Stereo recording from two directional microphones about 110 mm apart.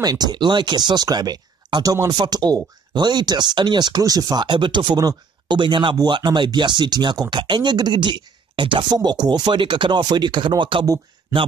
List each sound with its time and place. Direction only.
0.0 s speech: 40° right (ahead or behind)